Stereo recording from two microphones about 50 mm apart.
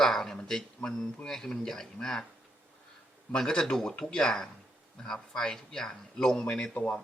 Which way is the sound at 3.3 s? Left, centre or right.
Centre.